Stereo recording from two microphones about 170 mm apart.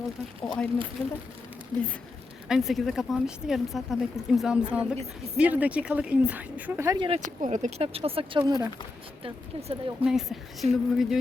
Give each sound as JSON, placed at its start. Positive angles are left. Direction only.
{"t": 0.4, "sound": "speech", "side_deg": 5}
{"t": 1.7, "sound": "speech", "side_deg": -25}
{"t": 2.5, "sound": "speech", "side_deg": 0}
{"t": 7.2, "sound": "speech", "side_deg": -45}
{"t": 9.2, "sound": "speech", "side_deg": -35}
{"t": 10.0, "sound": "speech", "side_deg": 0}